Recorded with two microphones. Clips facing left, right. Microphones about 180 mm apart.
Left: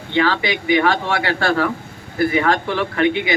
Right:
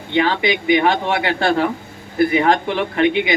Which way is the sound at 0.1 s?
20° right (ahead or behind).